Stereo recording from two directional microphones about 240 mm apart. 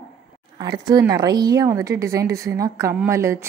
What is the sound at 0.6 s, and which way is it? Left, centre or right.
A woman's voice, centre.